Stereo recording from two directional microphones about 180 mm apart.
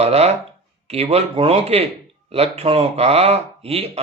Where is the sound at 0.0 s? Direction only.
35° right (ahead or behind).